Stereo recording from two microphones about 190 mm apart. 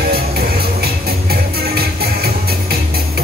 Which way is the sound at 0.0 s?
55° right (ahead or behind).